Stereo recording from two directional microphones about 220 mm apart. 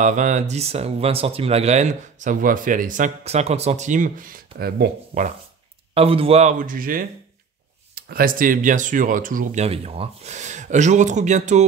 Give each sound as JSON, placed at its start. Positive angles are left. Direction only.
{"t": 0.0, "sound": "speech", "side_deg": -35}
{"t": 5.9, "sound": "speech", "side_deg": -25}